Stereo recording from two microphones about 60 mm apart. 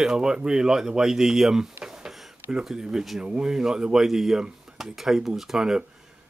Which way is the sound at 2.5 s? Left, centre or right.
Centre.